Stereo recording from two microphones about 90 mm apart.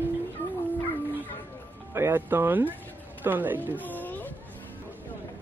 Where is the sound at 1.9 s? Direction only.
25° right (ahead or behind).